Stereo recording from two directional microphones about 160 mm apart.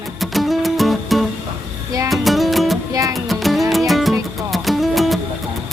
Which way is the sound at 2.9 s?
20° right (ahead or behind).